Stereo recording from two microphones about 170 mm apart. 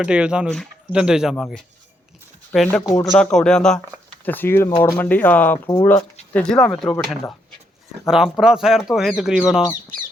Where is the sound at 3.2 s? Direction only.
5° left (ahead or behind).